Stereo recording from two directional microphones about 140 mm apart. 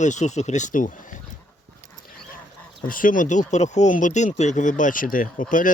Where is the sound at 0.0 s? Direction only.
60° left (ahead or behind).